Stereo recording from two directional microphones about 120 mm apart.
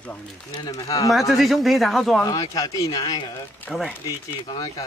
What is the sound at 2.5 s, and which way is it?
Speech, 30° left (ahead or behind).